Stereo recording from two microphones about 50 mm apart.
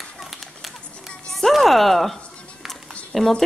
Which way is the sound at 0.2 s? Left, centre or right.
Centre.